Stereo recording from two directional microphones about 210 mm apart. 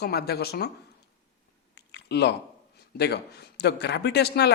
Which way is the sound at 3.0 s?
50° left (ahead or behind).